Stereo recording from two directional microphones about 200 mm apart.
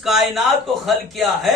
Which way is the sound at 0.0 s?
Centre (ahead or behind).